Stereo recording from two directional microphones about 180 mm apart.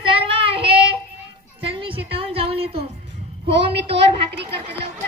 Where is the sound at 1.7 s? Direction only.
30° right (ahead or behind).